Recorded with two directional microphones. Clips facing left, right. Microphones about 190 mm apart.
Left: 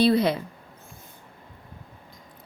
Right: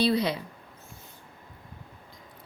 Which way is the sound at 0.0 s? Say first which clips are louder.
Left 5 dB; 55° left (ahead or behind).